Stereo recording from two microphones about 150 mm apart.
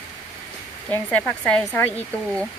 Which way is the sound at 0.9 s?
10° left (ahead or behind).